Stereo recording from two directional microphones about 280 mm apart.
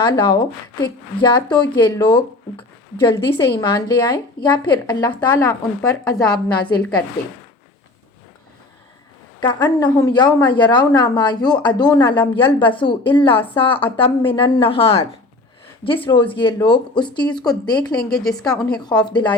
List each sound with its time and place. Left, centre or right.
0.0 s a woman's voice: centre
9.4 s a woman's voice: centre
16.3 s a woman's voice: centre
17.9 s a woman's voice: centre
18.8 s a woman's voice: centre